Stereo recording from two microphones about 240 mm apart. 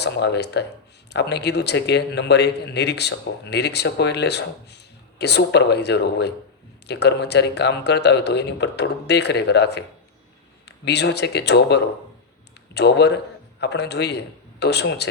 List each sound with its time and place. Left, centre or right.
0.0 s a man's voice: left